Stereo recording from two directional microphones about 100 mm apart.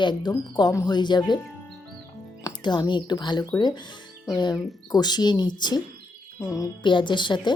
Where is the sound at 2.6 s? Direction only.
45° left (ahead or behind).